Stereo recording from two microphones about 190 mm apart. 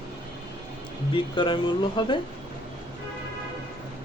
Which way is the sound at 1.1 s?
25° left (ahead or behind).